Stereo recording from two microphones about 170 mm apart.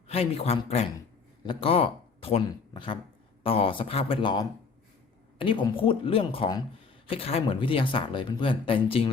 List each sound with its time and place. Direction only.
0.1 s speech: 35° left (ahead or behind)